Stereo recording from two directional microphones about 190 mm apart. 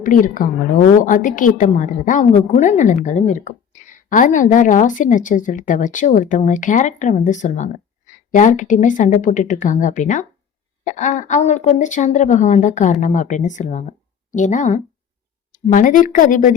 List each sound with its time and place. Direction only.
0.0 s a woman's voice: 45° left (ahead or behind)